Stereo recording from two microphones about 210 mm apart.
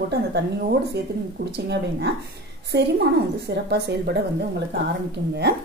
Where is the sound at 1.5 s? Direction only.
50° right (ahead or behind).